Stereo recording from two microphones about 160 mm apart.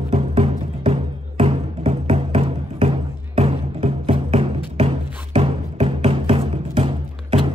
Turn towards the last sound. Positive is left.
turn(degrees=-35)  # may be behind; listen again after turning